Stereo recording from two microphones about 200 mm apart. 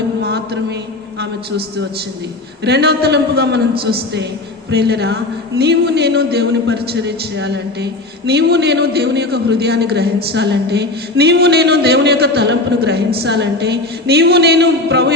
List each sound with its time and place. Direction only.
0.2 s music: 55° right (ahead or behind)
2.6 s a man's voice: 55° right (ahead or behind)